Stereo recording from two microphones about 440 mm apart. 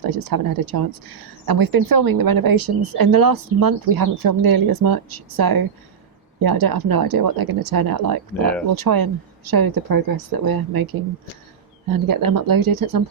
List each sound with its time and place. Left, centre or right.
0.0 s speech: right
11.9 s speech: right